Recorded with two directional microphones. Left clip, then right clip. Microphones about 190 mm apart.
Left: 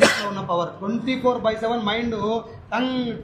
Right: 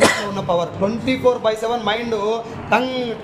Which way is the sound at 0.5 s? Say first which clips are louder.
Right 8 dB; 25° right (ahead or behind).